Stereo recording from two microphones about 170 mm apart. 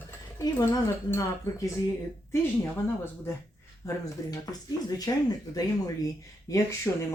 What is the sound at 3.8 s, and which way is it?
Speech, 20° left (ahead or behind).